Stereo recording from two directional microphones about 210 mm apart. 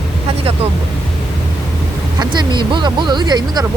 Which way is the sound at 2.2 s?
20° right (ahead or behind).